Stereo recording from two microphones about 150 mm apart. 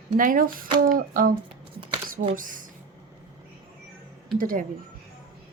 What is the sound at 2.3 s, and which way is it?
Speech, 65° right (ahead or behind).